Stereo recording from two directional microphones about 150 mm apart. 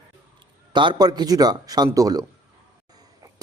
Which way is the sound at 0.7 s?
30° right (ahead or behind).